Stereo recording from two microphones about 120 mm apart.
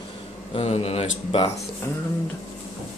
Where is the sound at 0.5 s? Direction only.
60° left (ahead or behind).